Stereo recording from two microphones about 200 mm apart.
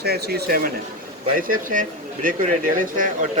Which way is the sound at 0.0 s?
55° right (ahead or behind).